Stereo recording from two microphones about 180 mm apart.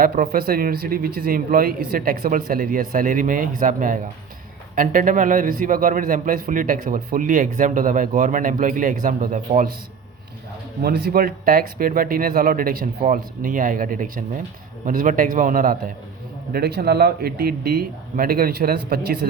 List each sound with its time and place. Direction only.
0.0 s a man's voice: 50° right (ahead or behind)
10.8 s a man's voice: 60° right (ahead or behind)
16.5 s speech: 60° right (ahead or behind)